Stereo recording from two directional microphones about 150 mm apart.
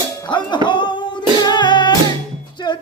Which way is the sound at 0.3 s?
30° left (ahead or behind).